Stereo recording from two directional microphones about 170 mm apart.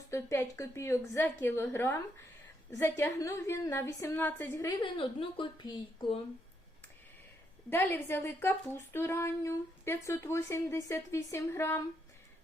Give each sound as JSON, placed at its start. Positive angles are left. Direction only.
{"t": 0.1, "sound": "a woman's voice", "side_deg": 15}
{"t": 7.7, "sound": "speech", "side_deg": 15}